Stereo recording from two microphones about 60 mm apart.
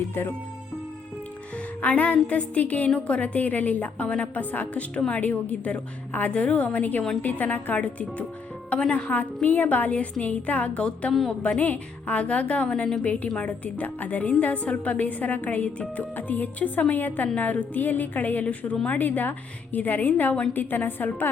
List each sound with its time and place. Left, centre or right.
1.5 s a woman's voice: left
11.6 s a woman's voice: left